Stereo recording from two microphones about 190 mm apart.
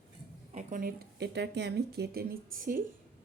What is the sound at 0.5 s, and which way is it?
Speech, 45° right (ahead or behind).